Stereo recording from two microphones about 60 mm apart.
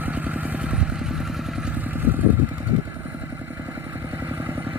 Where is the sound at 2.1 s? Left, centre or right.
Right.